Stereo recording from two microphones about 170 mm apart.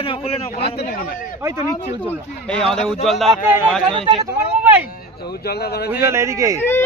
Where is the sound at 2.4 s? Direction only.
5° left (ahead or behind).